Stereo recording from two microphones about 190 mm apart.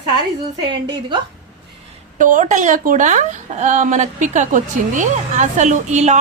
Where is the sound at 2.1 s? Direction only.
45° right (ahead or behind).